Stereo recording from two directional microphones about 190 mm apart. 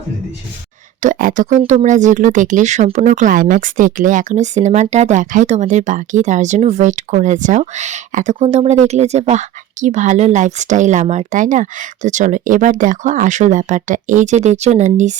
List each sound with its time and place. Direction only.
1.0 s speech: 45° right (ahead or behind)